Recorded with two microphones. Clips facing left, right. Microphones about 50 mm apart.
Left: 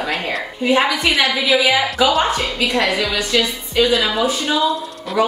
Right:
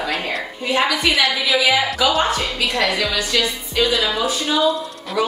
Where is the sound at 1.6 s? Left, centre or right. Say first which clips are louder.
Left 2 dB; centre.